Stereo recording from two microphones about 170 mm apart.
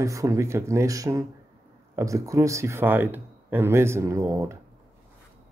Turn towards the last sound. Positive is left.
turn(degrees=-20)  # may be behind; listen again after turning